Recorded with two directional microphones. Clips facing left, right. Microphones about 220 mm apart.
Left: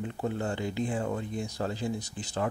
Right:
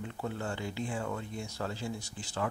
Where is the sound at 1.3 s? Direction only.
15° left (ahead or behind).